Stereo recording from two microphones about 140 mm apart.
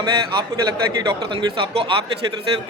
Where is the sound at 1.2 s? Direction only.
35° right (ahead or behind).